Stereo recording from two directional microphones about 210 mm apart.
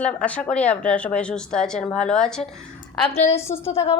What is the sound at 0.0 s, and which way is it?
Speech, 5° left (ahead or behind).